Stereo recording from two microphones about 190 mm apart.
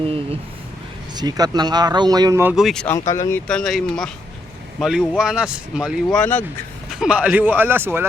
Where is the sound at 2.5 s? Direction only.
Centre (ahead or behind).